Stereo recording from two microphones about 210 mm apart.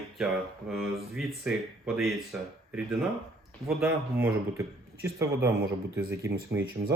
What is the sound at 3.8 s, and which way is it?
A man's voice, 10° right (ahead or behind).